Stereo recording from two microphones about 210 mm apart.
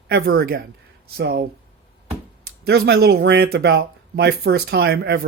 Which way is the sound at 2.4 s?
50° right (ahead or behind).